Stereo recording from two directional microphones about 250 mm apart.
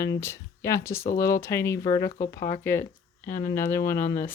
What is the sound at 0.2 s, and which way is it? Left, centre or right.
Speech, centre.